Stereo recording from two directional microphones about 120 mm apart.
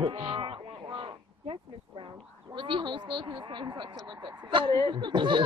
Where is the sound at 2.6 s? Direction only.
45° right (ahead or behind).